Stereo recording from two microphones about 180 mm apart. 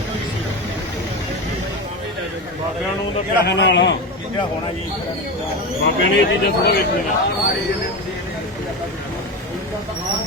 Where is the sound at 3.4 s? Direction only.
75° left (ahead or behind).